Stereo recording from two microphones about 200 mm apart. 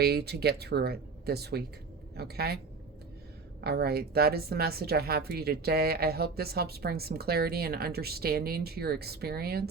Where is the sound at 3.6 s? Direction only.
50° right (ahead or behind).